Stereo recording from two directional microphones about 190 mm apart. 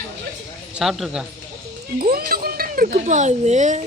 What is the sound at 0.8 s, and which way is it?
Speech, centre (ahead or behind).